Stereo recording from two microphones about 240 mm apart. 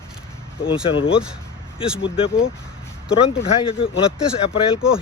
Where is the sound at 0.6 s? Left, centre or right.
Left.